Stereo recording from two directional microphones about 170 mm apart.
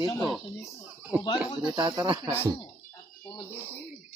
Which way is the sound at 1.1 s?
5° right (ahead or behind).